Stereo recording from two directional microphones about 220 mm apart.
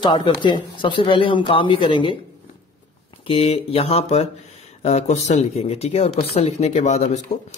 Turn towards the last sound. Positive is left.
turn(degrees=30)  # may be behind; listen again after turning